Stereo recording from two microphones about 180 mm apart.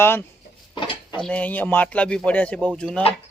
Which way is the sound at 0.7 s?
25° left (ahead or behind).